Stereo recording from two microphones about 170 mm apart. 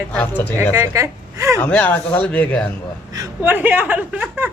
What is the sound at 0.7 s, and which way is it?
Speech, 15° right (ahead or behind).